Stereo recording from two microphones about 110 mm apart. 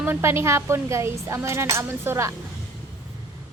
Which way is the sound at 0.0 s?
20° right (ahead or behind).